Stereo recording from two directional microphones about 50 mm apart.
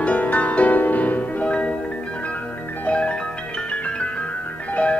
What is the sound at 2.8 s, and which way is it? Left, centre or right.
Music, left.